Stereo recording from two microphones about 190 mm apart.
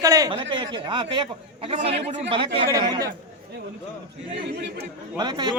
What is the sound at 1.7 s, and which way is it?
Speech, 35° right (ahead or behind).